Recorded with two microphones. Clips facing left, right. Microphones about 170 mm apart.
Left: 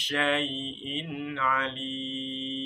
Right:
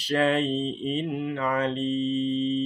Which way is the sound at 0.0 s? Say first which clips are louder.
Right 5 dB; 40° right (ahead or behind).